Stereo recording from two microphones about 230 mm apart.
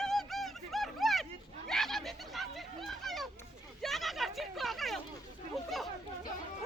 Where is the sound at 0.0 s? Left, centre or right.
Centre.